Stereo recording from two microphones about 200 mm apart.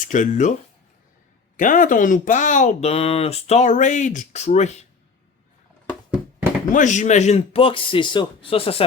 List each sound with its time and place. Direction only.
0.0 s speech: 40° left (ahead or behind)
1.5 s speech: 40° left (ahead or behind)
5.9 s a sound: 5° right (ahead or behind)
6.7 s a man's voice: 40° left (ahead or behind)